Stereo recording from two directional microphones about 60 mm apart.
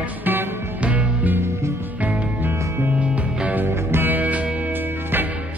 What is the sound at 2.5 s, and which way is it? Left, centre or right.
Music, right.